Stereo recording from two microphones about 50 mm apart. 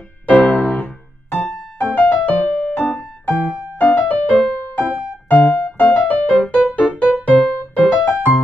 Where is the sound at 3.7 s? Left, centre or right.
Left.